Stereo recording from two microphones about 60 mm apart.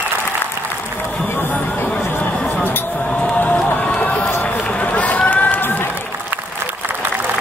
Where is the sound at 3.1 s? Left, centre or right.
Left.